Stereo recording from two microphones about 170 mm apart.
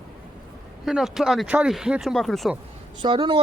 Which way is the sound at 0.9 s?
Centre (ahead or behind).